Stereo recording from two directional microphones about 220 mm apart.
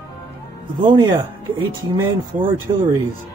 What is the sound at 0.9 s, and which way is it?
Speech, 20° right (ahead or behind).